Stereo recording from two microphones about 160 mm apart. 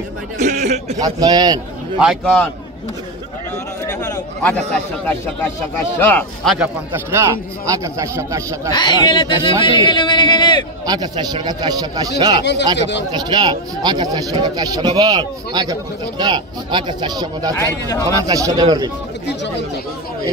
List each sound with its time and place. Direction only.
0.4 s a sound: 50° right (ahead or behind)
1.0 s speech: 25° right (ahead or behind)
2.0 s a man's voice: centre (ahead or behind)
4.4 s a man's voice: 10° left (ahead or behind)
6.4 s a man's voice: centre (ahead or behind)
7.1 s speech: 20° right (ahead or behind)
8.7 s speech: 25° left (ahead or behind)
10.9 s speech: 25° right (ahead or behind)
12.4 s speech: 90° left
13.1 s speech: 25° right (ahead or behind)
17.6 s a man's voice: 15° left (ahead or behind)
18.2 s speech: 20° right (ahead or behind)